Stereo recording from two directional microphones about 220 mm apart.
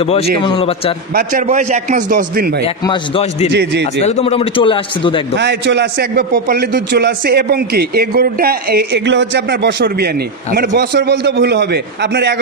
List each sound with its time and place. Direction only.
0.0 s a man's voice: 25° left (ahead or behind)
1.1 s a man's voice: 35° right (ahead or behind)
2.6 s a man's voice: 20° left (ahead or behind)
3.5 s a man's voice: 50° right (ahead or behind)
4.0 s a man's voice: 30° left (ahead or behind)
5.4 s a man's voice: 50° right (ahead or behind)